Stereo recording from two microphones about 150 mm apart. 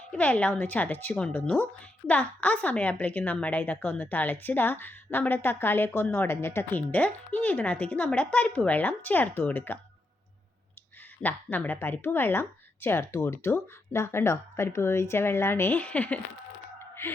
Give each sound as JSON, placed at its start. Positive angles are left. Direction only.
{"t": 0.1, "sound": "a woman's voice", "side_deg": 10}
{"t": 11.2, "sound": "a woman's voice", "side_deg": 10}
{"t": 17.0, "sound": "music", "side_deg": 15}